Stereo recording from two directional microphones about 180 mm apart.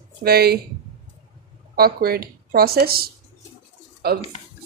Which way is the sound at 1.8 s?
60° right (ahead or behind).